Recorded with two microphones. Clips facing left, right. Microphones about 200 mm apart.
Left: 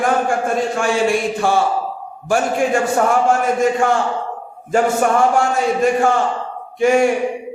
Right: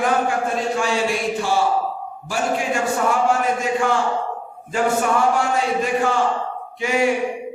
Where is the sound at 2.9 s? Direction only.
50° left (ahead or behind).